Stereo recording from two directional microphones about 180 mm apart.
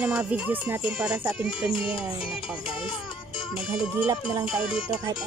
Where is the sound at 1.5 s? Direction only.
30° left (ahead or behind).